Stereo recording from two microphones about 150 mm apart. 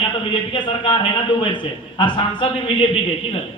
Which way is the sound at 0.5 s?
35° left (ahead or behind).